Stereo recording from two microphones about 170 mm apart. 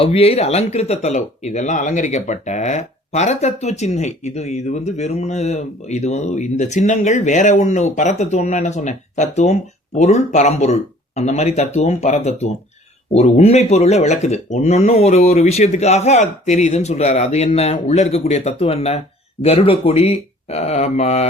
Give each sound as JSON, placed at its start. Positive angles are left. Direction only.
{"t": 0.0, "sound": "speech", "side_deg": 35}